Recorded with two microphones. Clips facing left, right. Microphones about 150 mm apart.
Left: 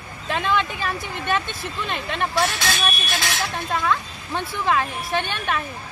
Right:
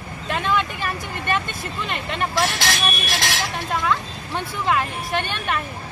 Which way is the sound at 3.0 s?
80° right.